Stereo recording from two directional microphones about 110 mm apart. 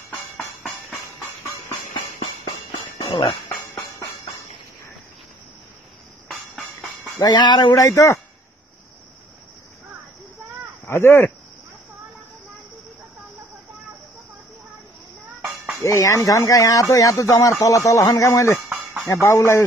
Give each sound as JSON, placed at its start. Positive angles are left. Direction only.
{"t": 0.4, "sound": "music", "side_deg": 0}
{"t": 2.1, "sound": "music", "side_deg": 45}
{"t": 3.1, "sound": "speech", "side_deg": 55}
{"t": 7.2, "sound": "speech", "side_deg": 40}
{"t": 7.7, "sound": "speech", "side_deg": 25}
{"t": 10.9, "sound": "speech", "side_deg": 25}
{"t": 15.8, "sound": "speech", "side_deg": 25}